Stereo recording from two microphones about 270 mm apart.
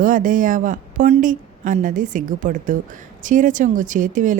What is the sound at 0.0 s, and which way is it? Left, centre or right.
A woman's voice, right.